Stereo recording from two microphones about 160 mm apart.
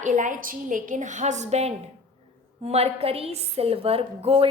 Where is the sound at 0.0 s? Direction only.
50° right (ahead or behind).